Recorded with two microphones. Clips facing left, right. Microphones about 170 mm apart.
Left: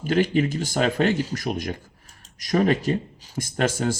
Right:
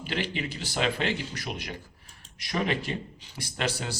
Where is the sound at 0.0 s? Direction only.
45° left (ahead or behind).